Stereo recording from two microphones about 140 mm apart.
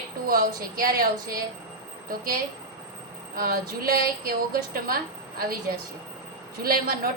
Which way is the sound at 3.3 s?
90° right.